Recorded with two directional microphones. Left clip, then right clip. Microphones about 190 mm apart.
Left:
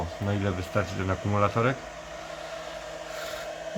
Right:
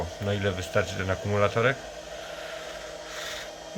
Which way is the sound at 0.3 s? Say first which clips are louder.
Right 3 dB; centre (ahead or behind).